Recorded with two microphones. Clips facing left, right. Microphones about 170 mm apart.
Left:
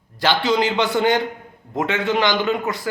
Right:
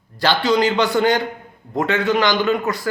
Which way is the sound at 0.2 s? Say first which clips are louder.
Right 2 dB; 20° left (ahead or behind).